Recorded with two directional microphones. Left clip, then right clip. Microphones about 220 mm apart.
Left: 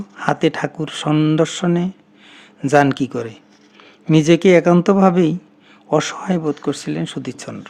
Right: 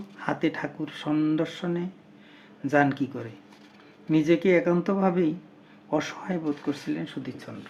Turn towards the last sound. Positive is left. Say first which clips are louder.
# left 9 dB
turn(degrees=50)  # may be behind; listen again after turning